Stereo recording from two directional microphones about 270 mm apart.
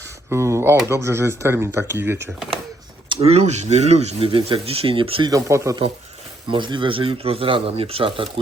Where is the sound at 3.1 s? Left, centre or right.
Right.